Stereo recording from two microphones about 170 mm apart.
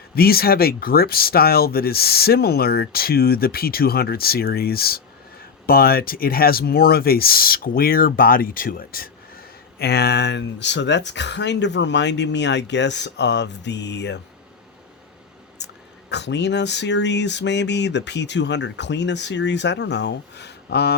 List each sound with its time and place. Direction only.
0.2 s speech: 65° left (ahead or behind)
9.7 s speech: 70° left (ahead or behind); by 14.2 s 90° left
15.5 s speech: 90° left